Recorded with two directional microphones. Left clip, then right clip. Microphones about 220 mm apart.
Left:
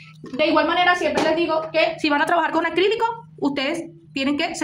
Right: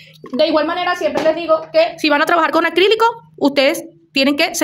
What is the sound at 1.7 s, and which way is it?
A woman's voice, 45° right (ahead or behind).